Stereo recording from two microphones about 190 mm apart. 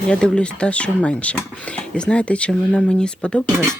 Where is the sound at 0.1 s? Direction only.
5° left (ahead or behind).